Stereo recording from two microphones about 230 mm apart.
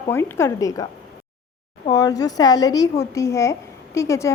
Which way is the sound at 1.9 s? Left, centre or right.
Centre.